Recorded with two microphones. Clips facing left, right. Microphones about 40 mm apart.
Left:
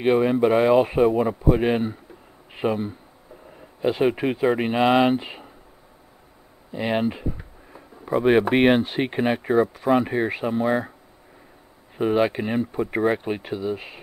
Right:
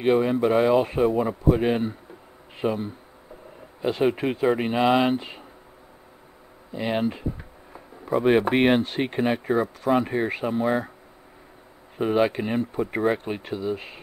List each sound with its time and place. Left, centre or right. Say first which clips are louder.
0.0 s speech: left 2 dB; centre
6.7 s speech: left 2 dB; centre
12.0 s speech: left 1 dB; centre